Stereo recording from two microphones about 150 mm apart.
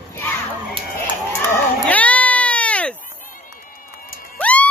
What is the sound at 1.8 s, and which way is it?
Cat, 10° left (ahead or behind).